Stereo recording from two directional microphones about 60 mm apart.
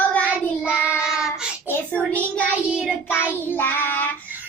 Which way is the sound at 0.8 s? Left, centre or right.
Left.